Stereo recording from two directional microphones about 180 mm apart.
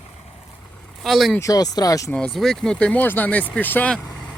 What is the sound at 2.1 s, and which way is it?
Speech, 5° left (ahead or behind).